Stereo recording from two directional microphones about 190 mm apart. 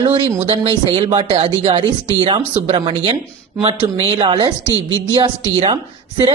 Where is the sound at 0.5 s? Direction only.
30° right (ahead or behind).